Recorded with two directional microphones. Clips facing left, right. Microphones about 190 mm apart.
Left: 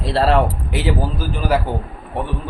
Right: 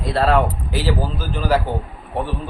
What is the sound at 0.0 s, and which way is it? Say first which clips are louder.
Speech: left 1 dB; 30° left (ahead or behind).